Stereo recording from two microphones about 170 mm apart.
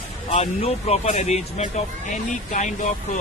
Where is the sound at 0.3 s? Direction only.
40° left (ahead or behind).